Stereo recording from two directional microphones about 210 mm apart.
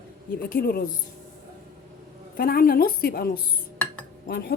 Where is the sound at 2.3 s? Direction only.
45° left (ahead or behind).